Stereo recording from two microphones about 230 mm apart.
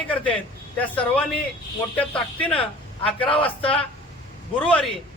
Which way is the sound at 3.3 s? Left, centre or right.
Left.